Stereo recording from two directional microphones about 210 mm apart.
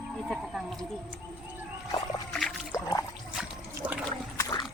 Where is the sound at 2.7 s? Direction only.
20° left (ahead or behind).